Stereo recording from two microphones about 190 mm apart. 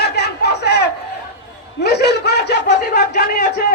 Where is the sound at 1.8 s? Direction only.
60° left (ahead or behind).